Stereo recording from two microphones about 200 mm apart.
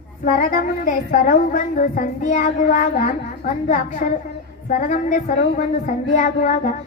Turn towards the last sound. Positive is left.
turn(degrees=40)  # may be behind; listen again after turning